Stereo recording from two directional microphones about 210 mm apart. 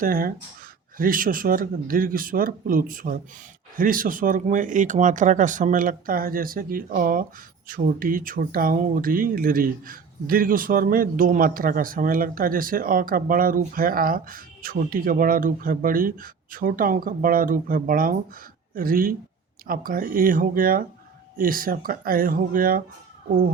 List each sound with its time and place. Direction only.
0.0 s speech: 45° right (ahead or behind)